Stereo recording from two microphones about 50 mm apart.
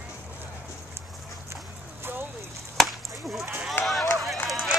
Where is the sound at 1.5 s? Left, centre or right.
Right.